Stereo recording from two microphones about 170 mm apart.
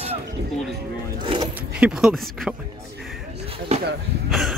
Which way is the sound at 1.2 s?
30° right (ahead or behind).